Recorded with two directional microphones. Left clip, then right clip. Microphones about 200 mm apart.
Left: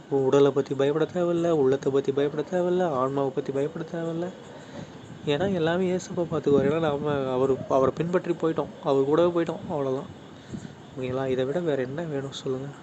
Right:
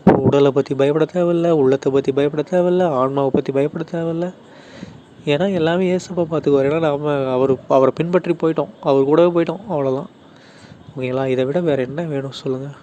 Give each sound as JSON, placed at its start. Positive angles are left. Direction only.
{"t": 0.3, "sound": "speech", "side_deg": -35}
{"t": 11.0, "sound": "speech", "side_deg": -35}